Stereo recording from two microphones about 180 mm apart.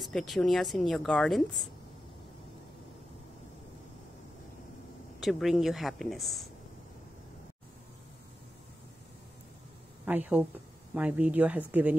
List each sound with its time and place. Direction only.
0.0 s speech: centre (ahead or behind)
5.2 s speech: centre (ahead or behind)
10.0 s speech: 10° right (ahead or behind)